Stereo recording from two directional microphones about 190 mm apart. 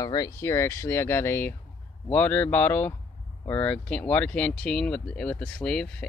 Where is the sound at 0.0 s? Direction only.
20° left (ahead or behind).